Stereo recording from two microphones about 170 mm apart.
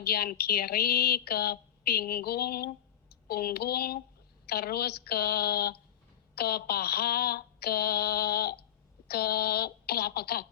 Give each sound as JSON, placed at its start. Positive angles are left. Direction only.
{"t": 0.0, "sound": "a woman's voice", "side_deg": 65}